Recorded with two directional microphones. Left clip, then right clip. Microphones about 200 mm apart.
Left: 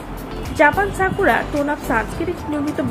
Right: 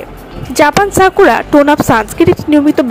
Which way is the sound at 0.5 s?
55° right (ahead or behind).